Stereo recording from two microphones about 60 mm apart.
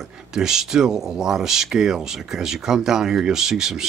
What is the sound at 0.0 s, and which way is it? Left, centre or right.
Speech, centre.